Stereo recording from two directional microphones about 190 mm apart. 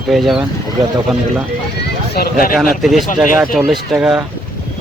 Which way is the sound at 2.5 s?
Centre (ahead or behind).